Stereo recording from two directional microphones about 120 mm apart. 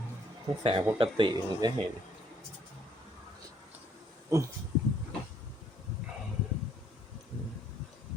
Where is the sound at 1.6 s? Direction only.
35° right (ahead or behind).